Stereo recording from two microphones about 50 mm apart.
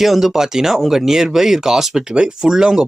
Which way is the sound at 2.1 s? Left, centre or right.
Centre.